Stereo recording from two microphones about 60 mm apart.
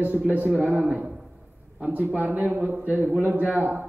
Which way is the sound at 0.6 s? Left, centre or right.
Right.